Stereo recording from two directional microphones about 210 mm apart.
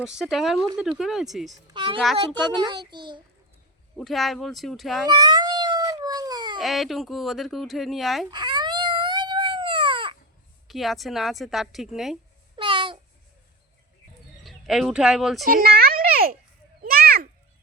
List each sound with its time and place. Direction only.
0.0 s speech: centre (ahead or behind)
1.5 s a child's voice: 25° right (ahead or behind)
3.9 s speech: centre (ahead or behind)
5.0 s cat: 20° right (ahead or behind)
6.6 s speech: centre (ahead or behind)
8.3 s baby cry: 20° right (ahead or behind)
10.7 s speech: centre (ahead or behind)
12.5 s babbling: 25° right (ahead or behind)
14.4 s speech: centre (ahead or behind)
15.4 s a sound: 45° right (ahead or behind)